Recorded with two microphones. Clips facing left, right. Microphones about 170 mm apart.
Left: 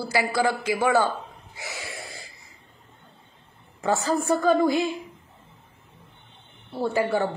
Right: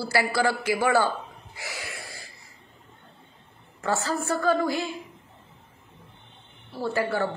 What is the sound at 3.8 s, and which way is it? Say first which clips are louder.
A woman's voice: left 3 dB; 15° left (ahead or behind).